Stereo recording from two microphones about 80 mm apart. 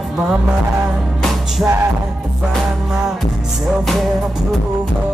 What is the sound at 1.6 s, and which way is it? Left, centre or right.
Music, right.